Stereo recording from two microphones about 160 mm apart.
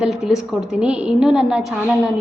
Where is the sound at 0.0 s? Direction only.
5° right (ahead or behind).